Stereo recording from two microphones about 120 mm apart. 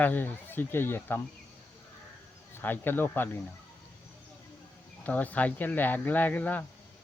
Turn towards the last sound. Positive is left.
turn(degrees=15)  # may be behind; listen again after turning